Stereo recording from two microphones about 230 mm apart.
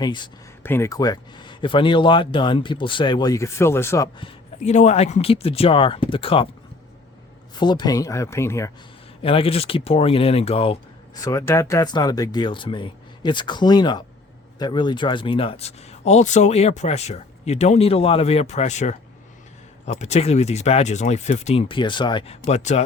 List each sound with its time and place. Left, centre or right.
0.0 s speech: centre
4.6 s speech: left
7.6 s speech: centre
9.2 s speech: left